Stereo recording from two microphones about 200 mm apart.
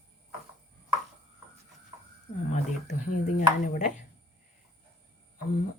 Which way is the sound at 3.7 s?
35° left (ahead or behind).